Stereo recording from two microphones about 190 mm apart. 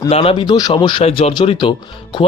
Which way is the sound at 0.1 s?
30° left (ahead or behind).